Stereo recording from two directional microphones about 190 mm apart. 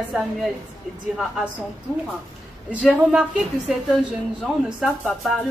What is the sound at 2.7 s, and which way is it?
A woman's voice, 5° right (ahead or behind).